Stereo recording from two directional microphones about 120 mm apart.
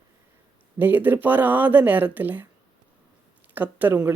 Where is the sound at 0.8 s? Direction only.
15° right (ahead or behind).